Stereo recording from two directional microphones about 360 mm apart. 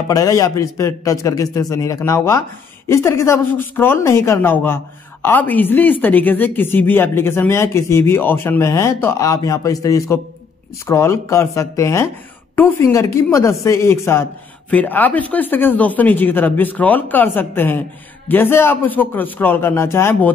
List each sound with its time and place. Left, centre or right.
0.1 s a woman's voice: centre